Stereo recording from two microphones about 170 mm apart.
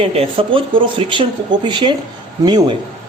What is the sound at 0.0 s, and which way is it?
A man's voice, 35° right (ahead or behind).